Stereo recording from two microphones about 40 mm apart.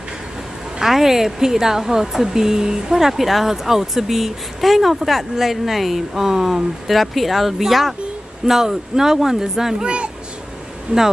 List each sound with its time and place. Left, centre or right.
0.7 s speech: centre
9.8 s a child's voice: right